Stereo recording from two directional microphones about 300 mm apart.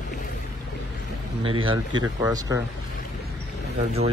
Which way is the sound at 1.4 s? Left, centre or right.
Centre.